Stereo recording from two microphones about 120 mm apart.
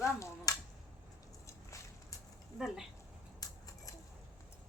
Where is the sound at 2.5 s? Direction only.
5° right (ahead or behind).